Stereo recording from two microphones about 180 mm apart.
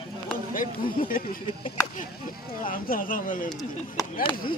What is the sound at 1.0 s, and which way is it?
Speech, 50° left (ahead or behind).